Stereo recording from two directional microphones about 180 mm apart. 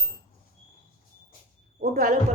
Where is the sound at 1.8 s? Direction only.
50° right (ahead or behind).